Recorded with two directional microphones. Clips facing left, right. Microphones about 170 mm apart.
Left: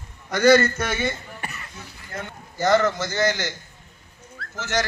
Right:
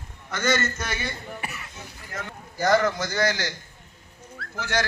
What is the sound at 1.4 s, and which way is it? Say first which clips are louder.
Cough: even; 5° right (ahead or behind).